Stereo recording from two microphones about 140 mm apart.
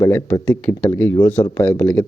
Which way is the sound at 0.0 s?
20° left (ahead or behind).